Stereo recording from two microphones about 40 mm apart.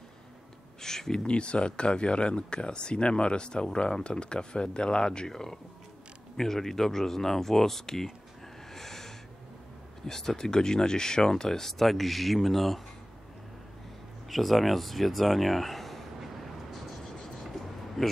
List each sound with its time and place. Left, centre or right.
0.7 s a sound: centre
1.2 s speech: left
5.3 s speech: centre
8.7 s snort: centre
10.0 s speech: centre
11.8 s speech: centre
14.3 s speech: centre
16.7 s a sound: centre